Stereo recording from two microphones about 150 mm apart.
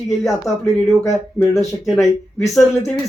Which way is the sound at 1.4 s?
Centre (ahead or behind).